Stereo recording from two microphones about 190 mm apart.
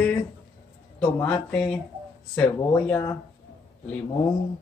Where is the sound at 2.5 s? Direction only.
10° left (ahead or behind).